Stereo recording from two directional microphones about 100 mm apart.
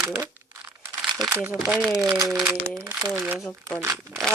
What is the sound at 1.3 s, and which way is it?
Speech, 20° right (ahead or behind).